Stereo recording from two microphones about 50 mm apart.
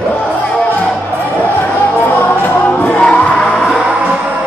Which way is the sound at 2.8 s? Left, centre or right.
Left.